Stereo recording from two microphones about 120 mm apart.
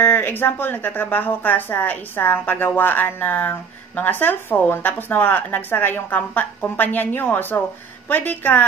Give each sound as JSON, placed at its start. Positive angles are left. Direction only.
{"t": 0.0, "sound": "speech", "side_deg": 15}